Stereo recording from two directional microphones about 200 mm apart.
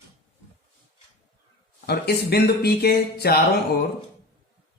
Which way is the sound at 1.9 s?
50° left (ahead or behind).